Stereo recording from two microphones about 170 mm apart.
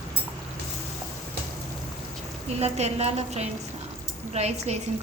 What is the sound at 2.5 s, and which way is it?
A woman's voice, 40° right (ahead or behind).